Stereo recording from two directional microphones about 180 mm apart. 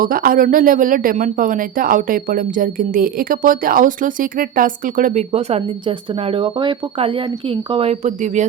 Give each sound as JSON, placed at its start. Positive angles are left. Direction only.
{"t": 0.0, "sound": "speech", "side_deg": -50}